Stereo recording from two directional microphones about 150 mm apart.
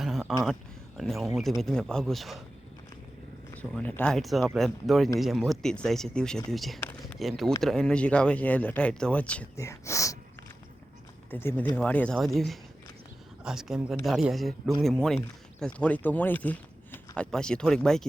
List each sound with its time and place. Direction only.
0.0 s a sound: centre (ahead or behind)
0.9 s speech: centre (ahead or behind)
3.5 s speech: 10° left (ahead or behind)
6.7 s a sound: 10° left (ahead or behind)
7.2 s speech: centre (ahead or behind)
9.6 s speech: 20° left (ahead or behind)
11.3 s speech: 15° left (ahead or behind)